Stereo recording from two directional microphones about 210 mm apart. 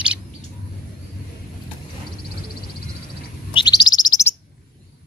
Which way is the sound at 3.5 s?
20° left (ahead or behind).